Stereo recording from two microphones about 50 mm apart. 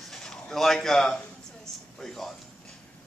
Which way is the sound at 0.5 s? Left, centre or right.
Centre.